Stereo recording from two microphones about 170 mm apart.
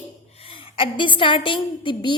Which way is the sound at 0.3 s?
30° left (ahead or behind).